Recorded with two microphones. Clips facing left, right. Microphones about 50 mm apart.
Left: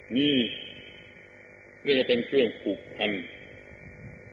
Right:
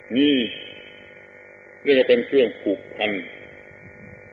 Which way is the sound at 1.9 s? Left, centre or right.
Right.